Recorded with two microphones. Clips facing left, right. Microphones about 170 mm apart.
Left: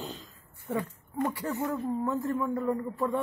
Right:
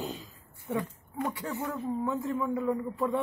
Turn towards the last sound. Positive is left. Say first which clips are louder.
# even
turn(degrees=-5)  # may be behind; listen again after turning